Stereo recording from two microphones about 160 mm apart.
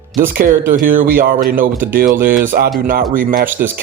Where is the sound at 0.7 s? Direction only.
55° right (ahead or behind).